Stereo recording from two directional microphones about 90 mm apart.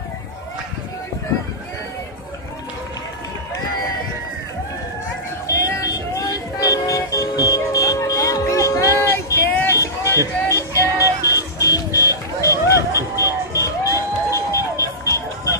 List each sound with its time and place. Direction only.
5.5 s vehicle: 40° left (ahead or behind)
10.5 s music: 35° left (ahead or behind)
13.2 s a sound: 40° left (ahead or behind)